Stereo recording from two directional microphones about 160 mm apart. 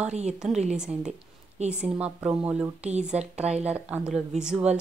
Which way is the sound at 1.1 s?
45° right (ahead or behind).